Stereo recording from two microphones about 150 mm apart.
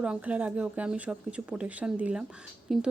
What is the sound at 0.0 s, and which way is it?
Speech, 10° right (ahead or behind).